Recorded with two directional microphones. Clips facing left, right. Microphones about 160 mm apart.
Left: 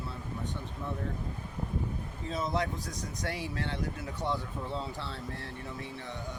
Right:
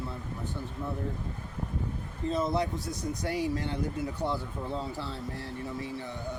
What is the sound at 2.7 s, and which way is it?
Speech, 90° left.